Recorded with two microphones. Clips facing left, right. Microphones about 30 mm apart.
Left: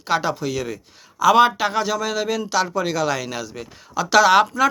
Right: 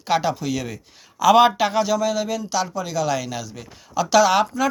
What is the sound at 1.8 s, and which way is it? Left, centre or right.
Speech, left.